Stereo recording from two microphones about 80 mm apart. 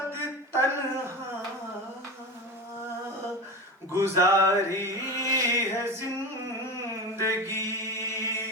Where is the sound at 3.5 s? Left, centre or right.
Right.